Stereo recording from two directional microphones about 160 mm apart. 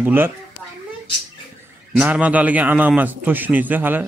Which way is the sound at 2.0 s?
10° right (ahead or behind).